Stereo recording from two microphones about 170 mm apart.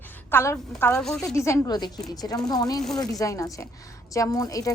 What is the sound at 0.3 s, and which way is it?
Speech, 15° left (ahead or behind).